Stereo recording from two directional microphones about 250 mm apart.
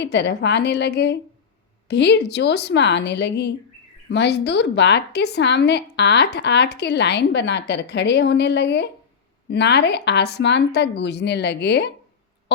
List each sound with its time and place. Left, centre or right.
0.0 s a woman's voice: left